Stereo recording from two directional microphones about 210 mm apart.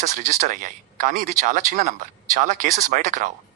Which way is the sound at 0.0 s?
35° right (ahead or behind).